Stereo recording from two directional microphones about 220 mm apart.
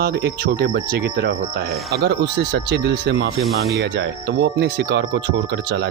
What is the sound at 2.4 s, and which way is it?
Speech, 50° right (ahead or behind).